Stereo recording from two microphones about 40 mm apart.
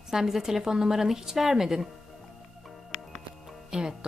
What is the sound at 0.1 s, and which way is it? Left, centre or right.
A woman's voice, centre.